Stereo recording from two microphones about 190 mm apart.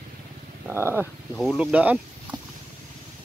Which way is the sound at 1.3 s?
5° left (ahead or behind).